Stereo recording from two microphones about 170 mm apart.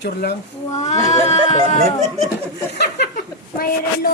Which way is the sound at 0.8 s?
45° left (ahead or behind).